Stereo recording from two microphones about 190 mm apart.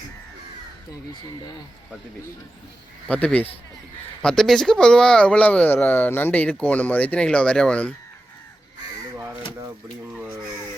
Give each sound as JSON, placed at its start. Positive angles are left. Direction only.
{"t": 3.1, "sound": "speech", "side_deg": 5}
{"t": 10.2, "sound": "speech", "side_deg": -15}